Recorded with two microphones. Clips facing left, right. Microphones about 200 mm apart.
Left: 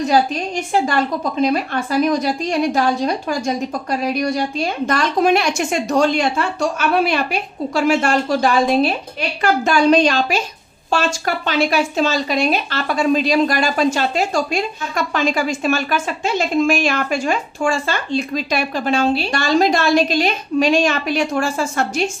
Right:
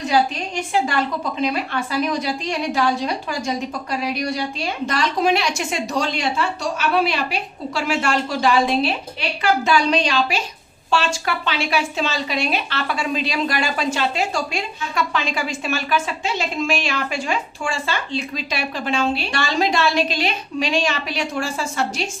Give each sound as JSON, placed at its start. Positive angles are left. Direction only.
{"t": 1.4, "sound": "speech", "side_deg": 45}